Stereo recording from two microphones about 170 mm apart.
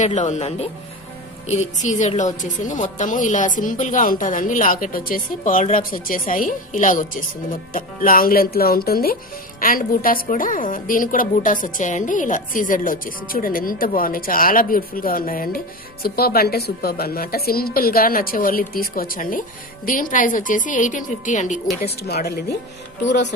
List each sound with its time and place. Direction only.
0.0 s a woman's voice: 45° left (ahead or behind)
22.0 s speech: 65° left (ahead or behind)
23.0 s speech: 90° left